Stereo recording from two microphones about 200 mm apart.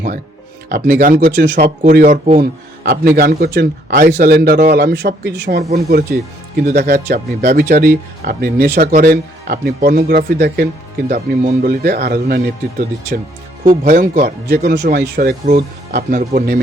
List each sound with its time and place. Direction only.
0.7 s a man's voice: 45° right (ahead or behind)
13.8 s speech: 45° right (ahead or behind)